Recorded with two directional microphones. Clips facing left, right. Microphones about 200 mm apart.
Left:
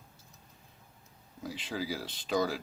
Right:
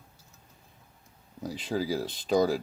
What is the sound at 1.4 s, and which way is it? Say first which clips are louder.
Speech: right 6 dB; 40° right (ahead or behind).